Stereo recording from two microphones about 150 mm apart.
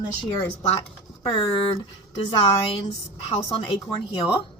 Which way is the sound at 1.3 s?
35° left (ahead or behind).